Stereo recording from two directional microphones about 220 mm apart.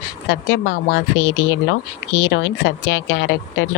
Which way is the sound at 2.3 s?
55° left (ahead or behind).